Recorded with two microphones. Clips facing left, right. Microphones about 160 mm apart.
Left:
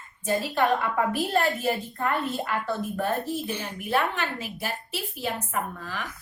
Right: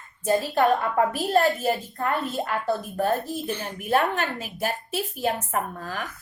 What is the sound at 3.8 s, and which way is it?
A woman's voice, 50° right (ahead or behind).